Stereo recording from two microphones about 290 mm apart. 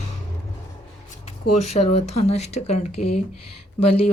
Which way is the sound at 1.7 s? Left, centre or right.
Left.